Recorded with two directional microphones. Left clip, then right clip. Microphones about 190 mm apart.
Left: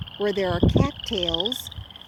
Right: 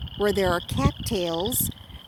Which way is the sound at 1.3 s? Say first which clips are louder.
Left 5 dB; 75° right (ahead or behind).